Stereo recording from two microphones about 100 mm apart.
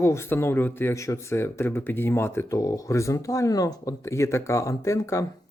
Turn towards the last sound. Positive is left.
turn(degrees=30)  # may be behind; listen again after turning